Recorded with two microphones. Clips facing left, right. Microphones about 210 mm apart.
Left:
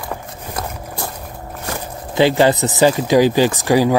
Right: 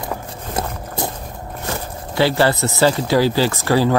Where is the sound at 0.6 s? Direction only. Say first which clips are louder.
Right 3 dB; 25° right (ahead or behind).